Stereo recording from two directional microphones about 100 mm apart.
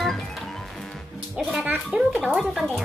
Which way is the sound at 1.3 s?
10° right (ahead or behind).